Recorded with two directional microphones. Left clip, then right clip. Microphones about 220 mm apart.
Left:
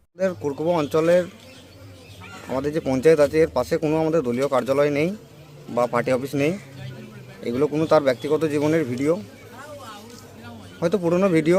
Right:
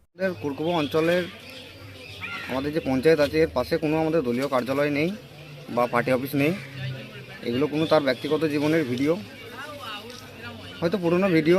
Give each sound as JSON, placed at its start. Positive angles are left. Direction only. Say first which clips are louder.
{"t": 0.2, "sound": "speech", "louder": "left 3 dB", "side_deg": 20}
{"t": 2.6, "sound": "speech", "louder": "left 3 dB", "side_deg": 30}
{"t": 5.7, "sound": "speech", "louder": "left 2 dB", "side_deg": 15}
{"t": 9.6, "sound": "a sound", "louder": "right 2 dB", "side_deg": 55}
{"t": 10.8, "sound": "speech", "louder": "left 3 dB", "side_deg": 20}